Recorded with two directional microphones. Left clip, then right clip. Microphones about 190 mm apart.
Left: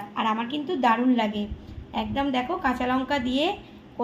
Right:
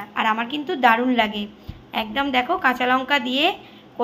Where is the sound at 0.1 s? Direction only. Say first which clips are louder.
Right 5 dB; 10° right (ahead or behind).